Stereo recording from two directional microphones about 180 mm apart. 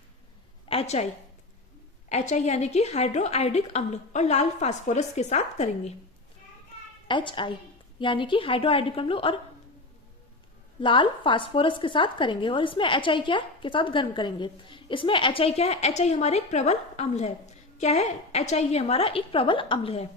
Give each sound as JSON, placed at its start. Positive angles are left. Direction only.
{"t": 0.7, "sound": "a woman's voice", "side_deg": 35}
{"t": 2.0, "sound": "a woman's voice", "side_deg": 40}
{"t": 7.1, "sound": "a woman's voice", "side_deg": 25}
{"t": 10.8, "sound": "a woman's voice", "side_deg": 25}